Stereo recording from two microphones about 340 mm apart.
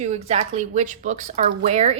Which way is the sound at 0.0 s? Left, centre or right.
Centre.